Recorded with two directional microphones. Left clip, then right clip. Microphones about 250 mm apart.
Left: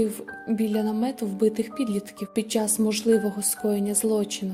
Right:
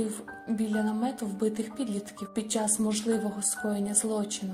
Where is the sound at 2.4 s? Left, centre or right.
Left.